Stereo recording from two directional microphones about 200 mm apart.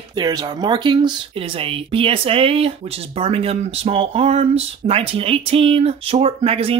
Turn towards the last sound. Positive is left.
turn(degrees=-30)  # may be behind; listen again after turning